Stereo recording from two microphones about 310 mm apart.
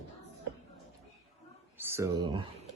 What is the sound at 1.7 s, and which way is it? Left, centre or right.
Speech, centre.